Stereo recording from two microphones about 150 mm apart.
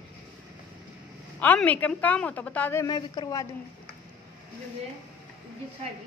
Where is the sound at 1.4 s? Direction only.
10° left (ahead or behind).